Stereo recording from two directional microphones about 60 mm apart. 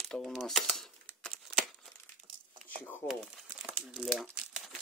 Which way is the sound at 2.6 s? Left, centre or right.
Left.